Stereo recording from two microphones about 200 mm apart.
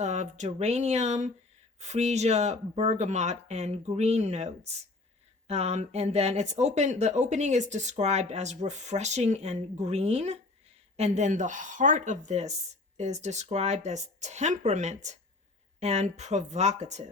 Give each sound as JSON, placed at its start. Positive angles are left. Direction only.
{"t": 0.0, "sound": "speech", "side_deg": -35}